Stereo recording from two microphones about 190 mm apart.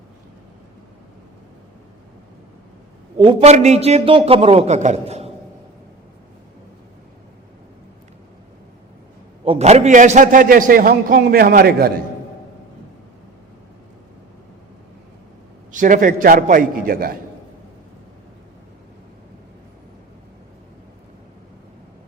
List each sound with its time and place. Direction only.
3.2 s a man's voice: 25° right (ahead or behind)
3.5 s a man's voice: 35° right (ahead or behind)
9.4 s a man's voice: 30° right (ahead or behind); by 12.0 s 55° right (ahead or behind)
15.7 s a man's voice: 45° right (ahead or behind)